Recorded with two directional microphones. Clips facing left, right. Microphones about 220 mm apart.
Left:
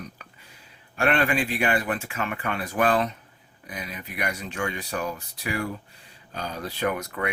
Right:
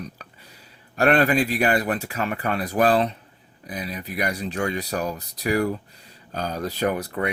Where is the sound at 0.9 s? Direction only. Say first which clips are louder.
Right 5 dB; 40° right (ahead or behind).